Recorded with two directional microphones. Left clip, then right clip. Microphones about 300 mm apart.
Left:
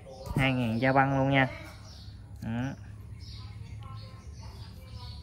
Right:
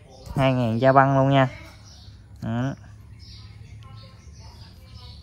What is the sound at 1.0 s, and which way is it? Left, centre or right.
Speech, left.